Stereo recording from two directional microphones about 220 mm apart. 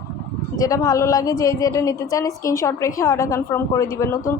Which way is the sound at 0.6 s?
15° left (ahead or behind).